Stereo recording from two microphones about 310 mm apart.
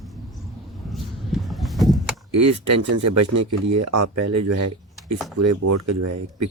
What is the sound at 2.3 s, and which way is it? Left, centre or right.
Speech, right.